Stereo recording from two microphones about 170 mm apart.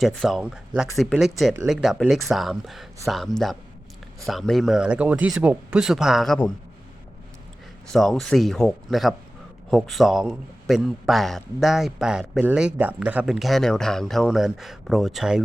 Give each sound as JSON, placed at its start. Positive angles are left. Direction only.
{"t": 0.0, "sound": "a man's voice", "side_deg": 0}
{"t": 7.9, "sound": "a man's voice", "side_deg": 0}